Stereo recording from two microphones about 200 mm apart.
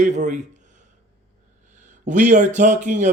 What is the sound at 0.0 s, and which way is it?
Speech, 40° right (ahead or behind).